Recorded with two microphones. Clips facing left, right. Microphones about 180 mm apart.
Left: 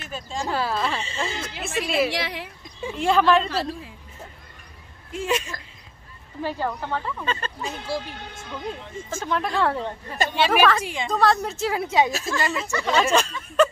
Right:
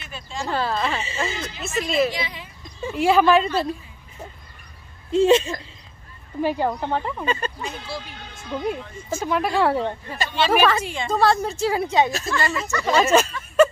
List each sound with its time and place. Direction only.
0.0 s speech: 45° left (ahead or behind)
0.5 s a woman's voice: 5° left (ahead or behind)
1.6 s a woman's voice: 10° left (ahead or behind)
2.0 s speech: 75° left (ahead or behind)
2.9 s speech: 5° right (ahead or behind)
5.1 s speech: 25° right (ahead or behind)
7.8 s speech: 40° left (ahead or behind)
9.1 s speech: 10° right (ahead or behind)
10.3 s a woman's voice: 10° left (ahead or behind)
11.1 s a woman's voice: centre (ahead or behind)
12.8 s a woman's voice: 5° right (ahead or behind)